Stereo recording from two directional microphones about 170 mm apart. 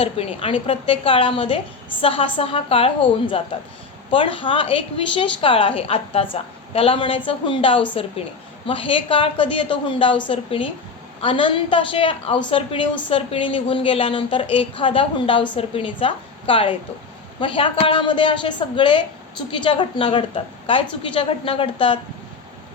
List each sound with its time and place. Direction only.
0.0 s a woman's voice: 35° left (ahead or behind)